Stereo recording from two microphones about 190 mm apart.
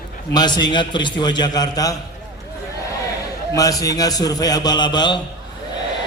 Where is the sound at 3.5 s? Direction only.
20° left (ahead or behind).